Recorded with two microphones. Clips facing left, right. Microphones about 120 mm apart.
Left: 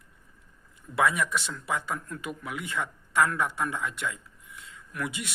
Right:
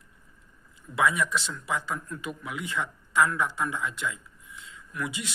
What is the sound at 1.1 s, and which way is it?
A man's voice, 55° left (ahead or behind).